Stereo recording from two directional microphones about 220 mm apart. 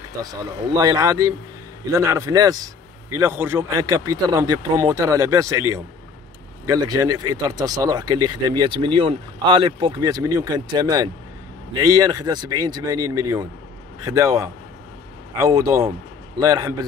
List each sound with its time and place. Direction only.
0.7 s speech: 15° right (ahead or behind)
7.1 s speech: 20° right (ahead or behind)